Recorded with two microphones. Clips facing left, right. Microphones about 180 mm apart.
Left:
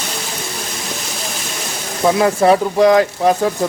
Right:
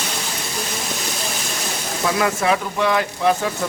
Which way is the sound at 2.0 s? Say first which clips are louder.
Left 7 dB; 30° left (ahead or behind).